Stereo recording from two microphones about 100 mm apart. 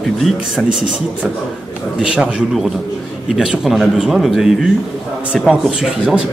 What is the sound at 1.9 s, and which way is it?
Speech, 10° right (ahead or behind).